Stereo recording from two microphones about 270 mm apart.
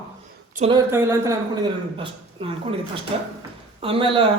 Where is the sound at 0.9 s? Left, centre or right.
Centre.